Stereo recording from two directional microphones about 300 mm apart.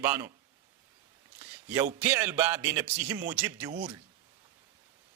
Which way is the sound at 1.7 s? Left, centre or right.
Centre.